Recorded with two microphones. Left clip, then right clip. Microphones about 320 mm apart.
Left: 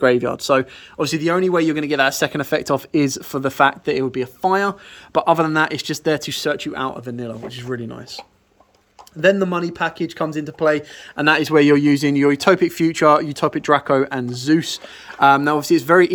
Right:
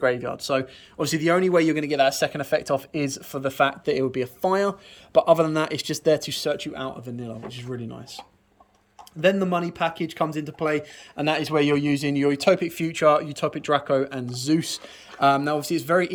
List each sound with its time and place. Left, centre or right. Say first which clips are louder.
0.0 s speech: left 7 dB; left
0.9 s a man's voice: left 3 dB; centre
9.2 s a man's voice: left 5 dB; centre